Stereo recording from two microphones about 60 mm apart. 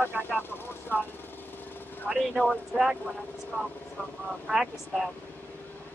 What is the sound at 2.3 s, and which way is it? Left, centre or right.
Speech, left.